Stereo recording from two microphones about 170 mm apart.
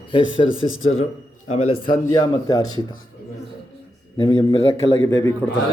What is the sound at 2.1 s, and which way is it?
Speech, 25° left (ahead or behind).